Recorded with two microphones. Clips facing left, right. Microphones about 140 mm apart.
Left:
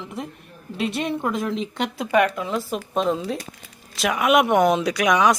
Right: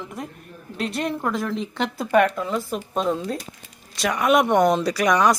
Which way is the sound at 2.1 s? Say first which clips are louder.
Right 1 dB; 5° left (ahead or behind).